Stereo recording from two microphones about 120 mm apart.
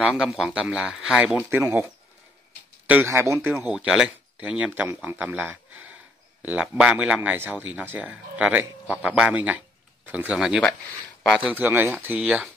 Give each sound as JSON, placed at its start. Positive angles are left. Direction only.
{"t": 0.2, "sound": "speech", "side_deg": -5}
{"t": 1.6, "sound": "speech", "side_deg": -25}
{"t": 3.1, "sound": "speech", "side_deg": -20}
{"t": 3.5, "sound": "speech", "side_deg": -5}
{"t": 11.4, "sound": "speech", "side_deg": -15}